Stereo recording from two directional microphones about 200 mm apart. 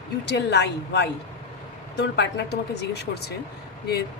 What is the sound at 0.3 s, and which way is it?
Speech, 55° left (ahead or behind).